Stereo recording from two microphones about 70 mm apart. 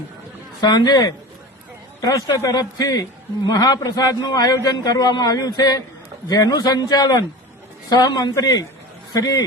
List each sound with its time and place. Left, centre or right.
0.6 s a man's voice: left
2.5 s a man's voice: left